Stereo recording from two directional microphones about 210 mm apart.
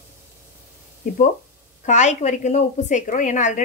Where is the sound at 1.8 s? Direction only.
35° left (ahead or behind).